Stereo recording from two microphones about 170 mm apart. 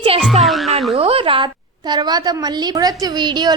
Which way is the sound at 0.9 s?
35° right (ahead or behind).